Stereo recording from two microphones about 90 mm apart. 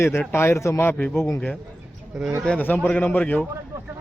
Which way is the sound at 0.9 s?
20° left (ahead or behind).